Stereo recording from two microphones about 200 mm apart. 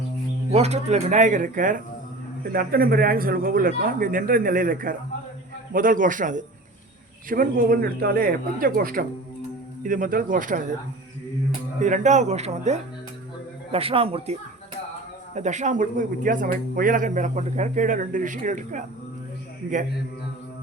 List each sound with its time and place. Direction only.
0.5 s speech: 30° right (ahead or behind)
11.8 s a man's voice: 35° right (ahead or behind)
15.4 s speech: 35° right (ahead or behind)